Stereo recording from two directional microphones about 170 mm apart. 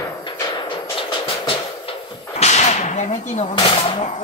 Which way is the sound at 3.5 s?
30° left (ahead or behind).